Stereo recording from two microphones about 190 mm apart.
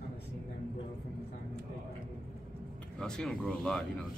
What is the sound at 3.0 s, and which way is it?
Speech, 5° left (ahead or behind).